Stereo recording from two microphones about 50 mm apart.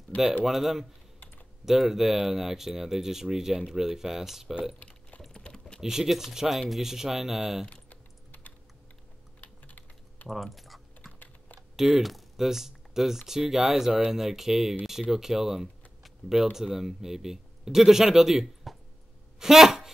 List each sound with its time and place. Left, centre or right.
0.5 s speech: centre
4.7 s typing: left
5.3 s typing: centre
5.8 s speech: centre
7.7 s typing: left
10.2 s speech: centre
19.4 s a sound: centre